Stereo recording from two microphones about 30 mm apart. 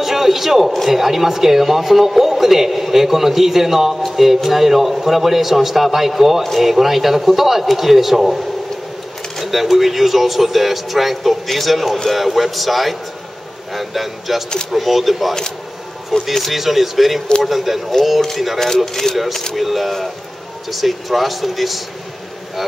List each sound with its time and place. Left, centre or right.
0.0 s a sound: centre
0.8 s speech: centre
9.4 s speech: centre
16.1 s speech: centre
16.5 s speech: centre
19.1 s speech: left
19.5 s speech: centre